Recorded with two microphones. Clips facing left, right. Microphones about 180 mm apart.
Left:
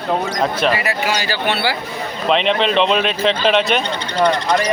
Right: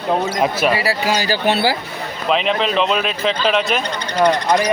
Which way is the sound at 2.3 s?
5° right (ahead or behind).